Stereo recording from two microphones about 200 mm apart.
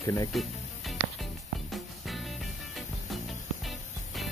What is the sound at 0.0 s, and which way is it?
Speech, 15° left (ahead or behind).